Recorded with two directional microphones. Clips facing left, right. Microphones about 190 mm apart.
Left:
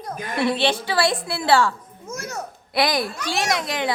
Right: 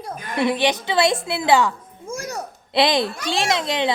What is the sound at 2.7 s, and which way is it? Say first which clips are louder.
A child's voice: right 3 dB; 25° right (ahead or behind).